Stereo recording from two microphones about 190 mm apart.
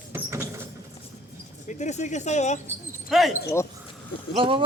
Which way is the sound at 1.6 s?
40° left (ahead or behind).